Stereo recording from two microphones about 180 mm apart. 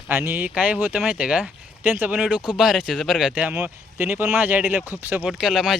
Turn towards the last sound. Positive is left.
turn(degrees=0)  # may be behind; listen again after turning